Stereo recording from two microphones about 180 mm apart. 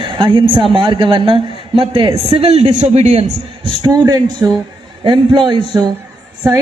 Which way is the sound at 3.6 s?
20° right (ahead or behind).